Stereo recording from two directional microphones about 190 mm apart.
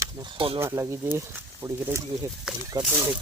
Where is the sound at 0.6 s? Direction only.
15° right (ahead or behind).